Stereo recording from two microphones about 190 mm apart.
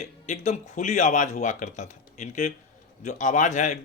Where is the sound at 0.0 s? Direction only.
40° left (ahead or behind).